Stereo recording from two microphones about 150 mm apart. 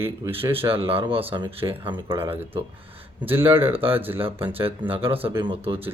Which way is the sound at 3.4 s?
35° right (ahead or behind).